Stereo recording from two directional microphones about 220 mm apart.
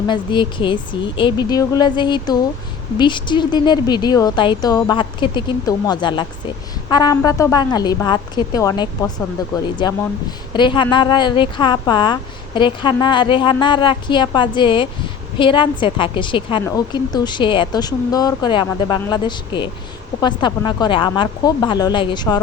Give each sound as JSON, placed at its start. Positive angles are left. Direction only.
{"t": 0.1, "sound": "a woman's voice", "side_deg": 20}